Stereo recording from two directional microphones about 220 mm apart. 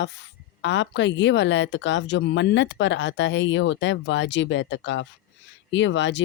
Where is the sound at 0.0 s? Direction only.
55° left (ahead or behind).